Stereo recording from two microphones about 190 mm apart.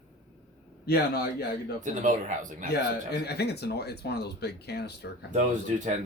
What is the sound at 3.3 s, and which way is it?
Speech, 60° left (ahead or behind).